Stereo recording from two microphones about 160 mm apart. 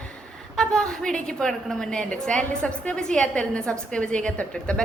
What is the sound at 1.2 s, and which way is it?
A woman's voice, 5° left (ahead or behind).